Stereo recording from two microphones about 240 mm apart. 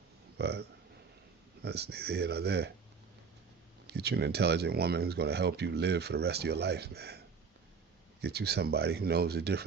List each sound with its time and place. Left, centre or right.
0.3 s speech: right
3.8 s speech: right
8.2 s speech: right